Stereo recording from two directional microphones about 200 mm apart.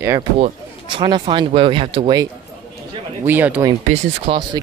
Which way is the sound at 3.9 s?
30° right (ahead or behind).